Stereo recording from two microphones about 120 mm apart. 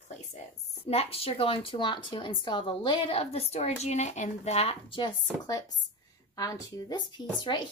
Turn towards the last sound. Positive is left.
turn(degrees=40)  # may be behind; listen again after turning